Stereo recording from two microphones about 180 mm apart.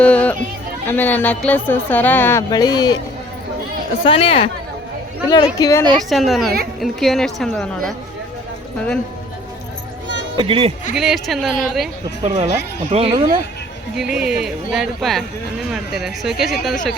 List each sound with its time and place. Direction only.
0.0 s a sound: 5° left (ahead or behind)
0.9 s speech: 10° left (ahead or behind)
2.5 s speech: 20° left (ahead or behind)
4.0 s speech: 30° left (ahead or behind)
6.0 s speech: centre (ahead or behind)
10.3 s speech: 30° right (ahead or behind)
10.9 s speech: centre (ahead or behind)
12.2 s speech: 35° right (ahead or behind)
13.9 s speech: 5° right (ahead or behind)